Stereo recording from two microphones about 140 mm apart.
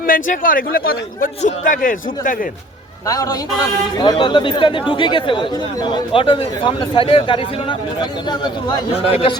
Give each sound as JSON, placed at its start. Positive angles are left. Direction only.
{"t": 0.0, "sound": "speech", "side_deg": 75}
{"t": 1.4, "sound": "a man's voice", "side_deg": 70}
{"t": 3.1, "sound": "a man's voice", "side_deg": 25}
{"t": 9.0, "sound": "a man's voice", "side_deg": 45}